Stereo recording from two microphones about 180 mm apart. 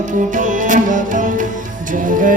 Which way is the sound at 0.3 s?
45° right (ahead or behind).